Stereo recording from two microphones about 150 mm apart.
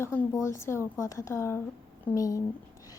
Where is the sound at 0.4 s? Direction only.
20° left (ahead or behind).